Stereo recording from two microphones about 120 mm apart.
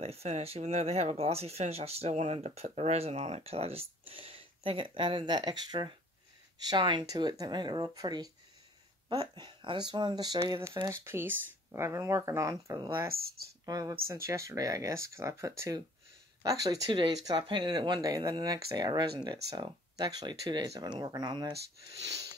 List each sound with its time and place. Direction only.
0.0 s speech: 60° right (ahead or behind); by 15.8 s 25° right (ahead or behind)
16.9 s speech: 40° right (ahead or behind)